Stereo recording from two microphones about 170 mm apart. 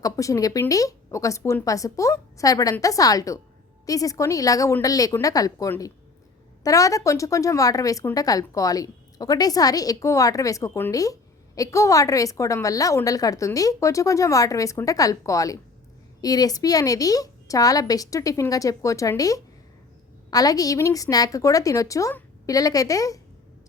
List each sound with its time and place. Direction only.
0.0 s a woman's voice: 20° left (ahead or behind)